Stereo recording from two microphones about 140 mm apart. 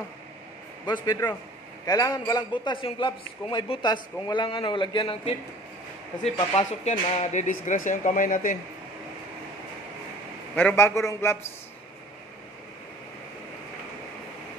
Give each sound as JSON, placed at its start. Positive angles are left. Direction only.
{"t": 0.8, "sound": "a man's voice", "side_deg": 30}
{"t": 7.4, "sound": "speech", "side_deg": 70}
{"t": 10.5, "sound": "a man's voice", "side_deg": 15}